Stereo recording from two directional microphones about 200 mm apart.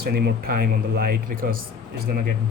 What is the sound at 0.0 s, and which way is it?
Speech, 50° right (ahead or behind).